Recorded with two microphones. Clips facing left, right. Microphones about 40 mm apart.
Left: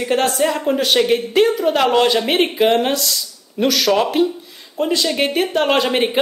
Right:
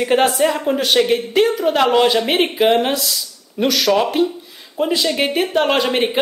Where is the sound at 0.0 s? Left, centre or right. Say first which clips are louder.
Right 3 dB; centre.